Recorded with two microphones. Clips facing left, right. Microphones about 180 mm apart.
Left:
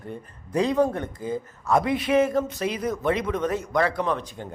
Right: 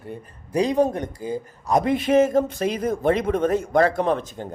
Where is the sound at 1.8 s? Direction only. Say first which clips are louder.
Right 5 dB; 45° right (ahead or behind).